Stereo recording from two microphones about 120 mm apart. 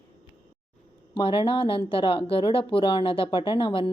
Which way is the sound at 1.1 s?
50° left (ahead or behind).